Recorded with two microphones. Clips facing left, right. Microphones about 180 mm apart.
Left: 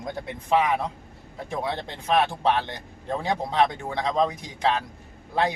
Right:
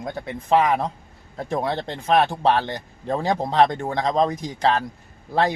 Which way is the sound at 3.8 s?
40° right (ahead or behind).